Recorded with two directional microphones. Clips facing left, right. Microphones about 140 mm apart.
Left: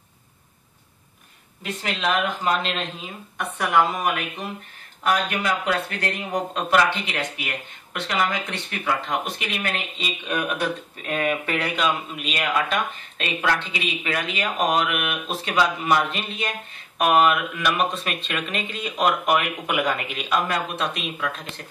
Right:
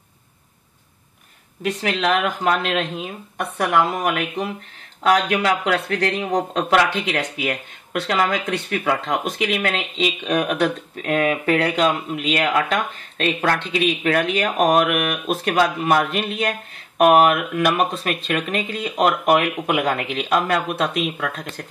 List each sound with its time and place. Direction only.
1.6 s speech: 75° right (ahead or behind)
5.0 s speech: 80° right
13.2 s speech: 50° right (ahead or behind)
13.7 s speech: 60° right (ahead or behind)
17.0 s speech: 50° right (ahead or behind)